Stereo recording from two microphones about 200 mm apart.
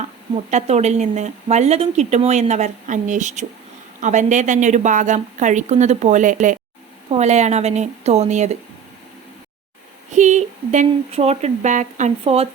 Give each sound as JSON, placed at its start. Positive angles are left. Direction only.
{"t": 0.5, "sound": "speech", "side_deg": -35}
{"t": 10.1, "sound": "speech", "side_deg": -35}